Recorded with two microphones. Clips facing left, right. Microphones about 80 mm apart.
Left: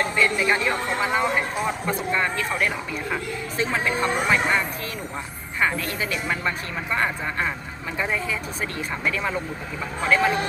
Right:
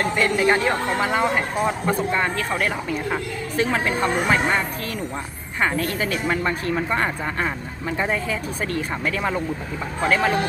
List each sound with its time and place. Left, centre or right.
0.0 s speech: right